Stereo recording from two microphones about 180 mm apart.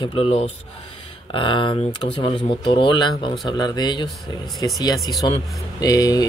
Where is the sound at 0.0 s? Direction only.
30° left (ahead or behind).